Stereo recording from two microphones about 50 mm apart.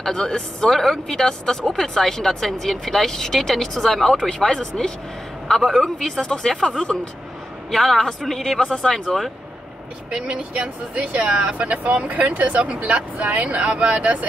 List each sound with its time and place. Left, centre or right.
0.0 s speech: centre
10.1 s speech: centre